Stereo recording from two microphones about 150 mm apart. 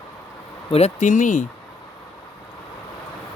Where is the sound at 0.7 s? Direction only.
45° left (ahead or behind).